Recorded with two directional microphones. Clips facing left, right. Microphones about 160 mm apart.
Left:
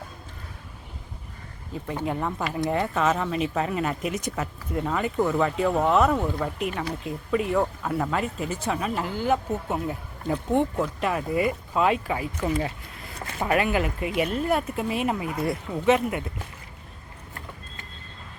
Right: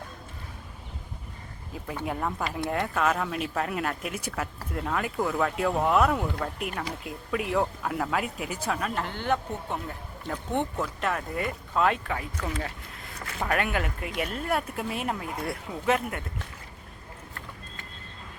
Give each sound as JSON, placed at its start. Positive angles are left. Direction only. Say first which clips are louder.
{"t": 1.7, "sound": "speech", "louder": "left 4 dB", "side_deg": -5}
{"t": 8.6, "sound": "speech", "louder": "left 2 dB", "side_deg": 0}
{"t": 13.1, "sound": "a sound", "louder": "left 3 dB", "side_deg": 30}
{"t": 13.5, "sound": "speech", "louder": "left 5 dB", "side_deg": 5}